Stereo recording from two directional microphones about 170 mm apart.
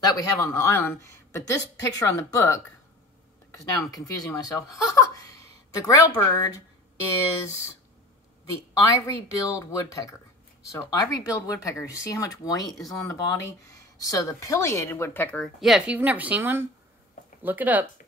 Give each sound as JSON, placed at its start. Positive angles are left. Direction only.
{"t": 0.0, "sound": "a woman's voice", "side_deg": 20}
{"t": 9.0, "sound": "a woman's voice", "side_deg": 20}